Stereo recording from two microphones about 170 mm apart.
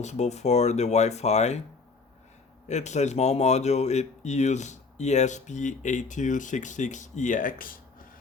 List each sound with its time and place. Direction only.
0.0 s speech: 40° left (ahead or behind)
2.6 s speech: 40° left (ahead or behind)